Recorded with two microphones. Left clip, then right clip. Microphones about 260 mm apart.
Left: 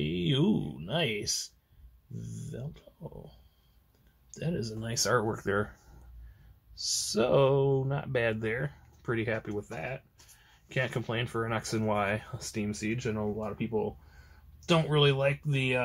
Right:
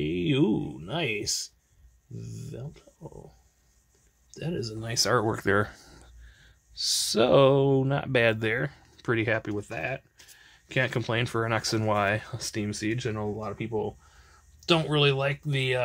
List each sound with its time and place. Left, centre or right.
0.0 s a sound: right
2.1 s speech: right
4.3 s speech: right